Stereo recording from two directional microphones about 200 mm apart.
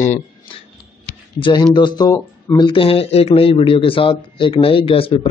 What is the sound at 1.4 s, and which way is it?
Speech, 20° left (ahead or behind).